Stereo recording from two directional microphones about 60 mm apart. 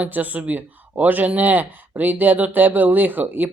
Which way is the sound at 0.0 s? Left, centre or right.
Right.